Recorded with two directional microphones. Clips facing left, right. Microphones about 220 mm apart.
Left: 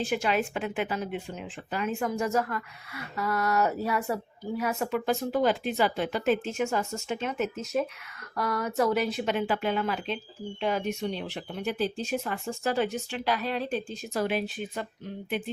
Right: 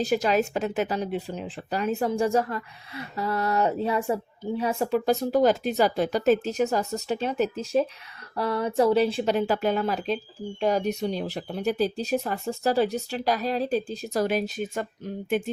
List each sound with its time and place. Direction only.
0.0 s speech: 40° right (ahead or behind)